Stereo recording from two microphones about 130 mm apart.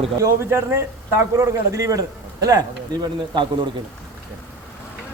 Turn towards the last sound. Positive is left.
turn(degrees=-35)  # may be behind; listen again after turning